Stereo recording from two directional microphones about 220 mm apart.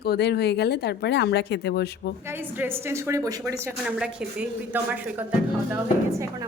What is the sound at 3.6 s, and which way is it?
Speech, 5° right (ahead or behind).